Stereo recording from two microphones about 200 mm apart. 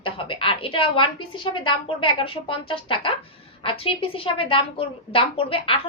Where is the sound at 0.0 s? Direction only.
25° left (ahead or behind).